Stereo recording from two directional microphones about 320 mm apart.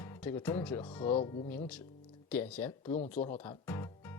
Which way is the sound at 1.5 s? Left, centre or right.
Centre.